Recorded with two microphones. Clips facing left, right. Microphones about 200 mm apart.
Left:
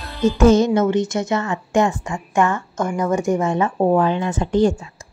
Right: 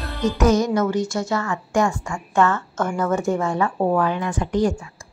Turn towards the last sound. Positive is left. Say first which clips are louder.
# left 4 dB
turn(degrees=25)  # may be behind; listen again after turning